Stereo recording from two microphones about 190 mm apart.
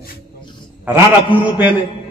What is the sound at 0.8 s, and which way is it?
Speech, 10° right (ahead or behind).